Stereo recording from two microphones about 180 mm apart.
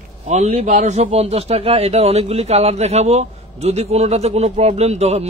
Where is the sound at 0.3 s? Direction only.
40° right (ahead or behind).